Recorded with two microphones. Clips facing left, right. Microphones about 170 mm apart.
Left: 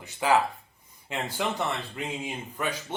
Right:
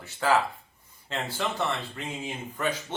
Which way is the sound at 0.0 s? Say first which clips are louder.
Left 1 dB; 15° left (ahead or behind).